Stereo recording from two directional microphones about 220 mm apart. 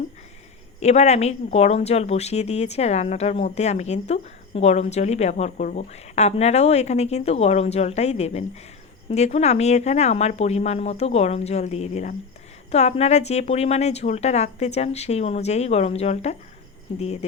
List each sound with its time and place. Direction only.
0.8 s a woman's voice: 30° left (ahead or behind)